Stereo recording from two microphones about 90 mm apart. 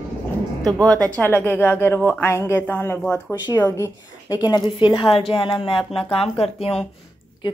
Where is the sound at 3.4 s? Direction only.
45° left (ahead or behind); by 6.8 s 90° left.